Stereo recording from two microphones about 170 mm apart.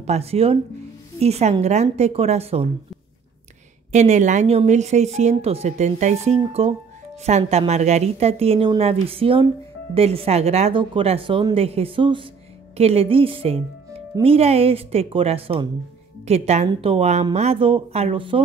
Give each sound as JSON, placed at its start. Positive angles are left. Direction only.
{"t": 0.0, "sound": "a woman's voice", "side_deg": -40}
{"t": 3.9, "sound": "a woman's voice", "side_deg": -45}